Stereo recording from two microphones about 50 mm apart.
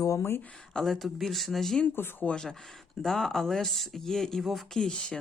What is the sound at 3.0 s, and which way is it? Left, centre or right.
Speech, centre.